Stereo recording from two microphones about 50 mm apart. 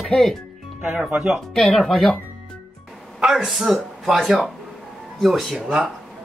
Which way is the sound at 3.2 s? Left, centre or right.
Centre.